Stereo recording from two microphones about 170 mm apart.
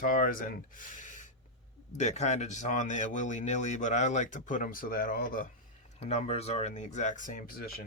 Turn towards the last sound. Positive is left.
turn(degrees=60)  # may be behind; listen again after turning